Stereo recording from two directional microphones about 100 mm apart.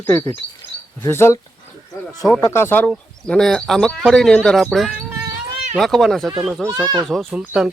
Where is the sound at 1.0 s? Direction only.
25° left (ahead or behind).